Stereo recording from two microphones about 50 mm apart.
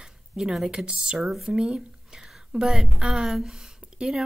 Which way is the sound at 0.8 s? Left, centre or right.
Centre.